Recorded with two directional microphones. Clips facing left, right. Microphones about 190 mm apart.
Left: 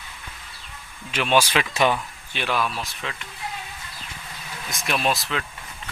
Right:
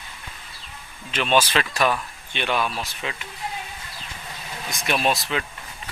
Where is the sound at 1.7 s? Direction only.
20° left (ahead or behind).